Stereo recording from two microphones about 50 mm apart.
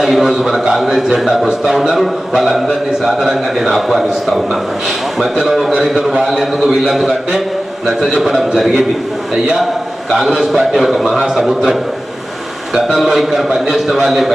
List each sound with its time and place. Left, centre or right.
0.0 s a man's voice: centre
6.7 s a man's voice: centre
10.1 s a man's voice: centre